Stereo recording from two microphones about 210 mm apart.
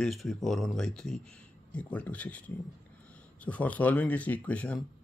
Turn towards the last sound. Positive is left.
turn(degrees=5)  # may be behind; listen again after turning